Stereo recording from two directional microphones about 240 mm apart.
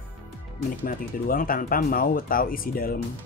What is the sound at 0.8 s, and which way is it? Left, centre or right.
Speech, left.